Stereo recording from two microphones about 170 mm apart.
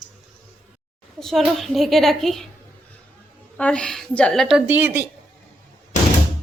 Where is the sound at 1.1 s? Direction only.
Centre (ahead or behind).